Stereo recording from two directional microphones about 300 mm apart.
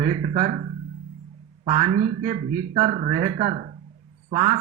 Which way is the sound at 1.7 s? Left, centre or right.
Right.